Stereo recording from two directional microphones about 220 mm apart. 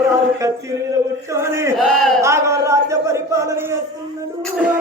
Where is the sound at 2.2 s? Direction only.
15° right (ahead or behind).